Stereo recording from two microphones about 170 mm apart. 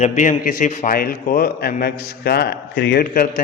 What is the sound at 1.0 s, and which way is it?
A man's voice, 60° left (ahead or behind).